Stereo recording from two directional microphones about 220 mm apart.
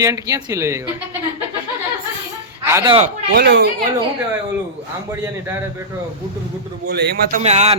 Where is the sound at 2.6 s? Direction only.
10° right (ahead or behind).